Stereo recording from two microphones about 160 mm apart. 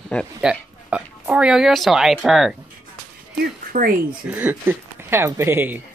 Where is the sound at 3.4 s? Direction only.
60° right (ahead or behind).